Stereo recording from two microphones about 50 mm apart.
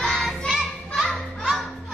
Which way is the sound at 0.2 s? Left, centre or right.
Centre.